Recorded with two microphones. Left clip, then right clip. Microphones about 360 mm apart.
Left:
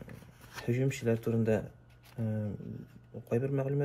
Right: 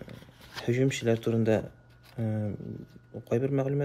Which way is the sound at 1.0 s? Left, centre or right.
Right.